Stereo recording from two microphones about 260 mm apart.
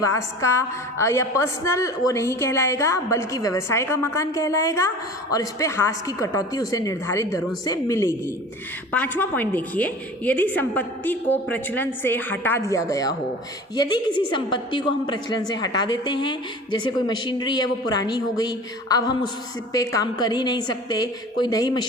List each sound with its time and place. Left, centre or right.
0.0 s a woman's voice: centre